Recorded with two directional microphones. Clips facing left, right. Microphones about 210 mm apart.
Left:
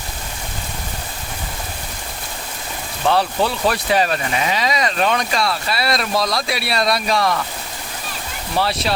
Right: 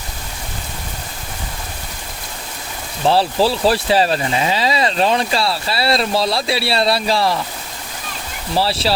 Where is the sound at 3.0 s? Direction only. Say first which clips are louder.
Right 3 dB; 30° right (ahead or behind).